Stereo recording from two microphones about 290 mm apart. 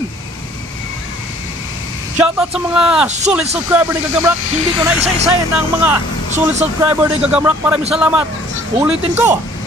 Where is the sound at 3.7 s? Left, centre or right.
Centre.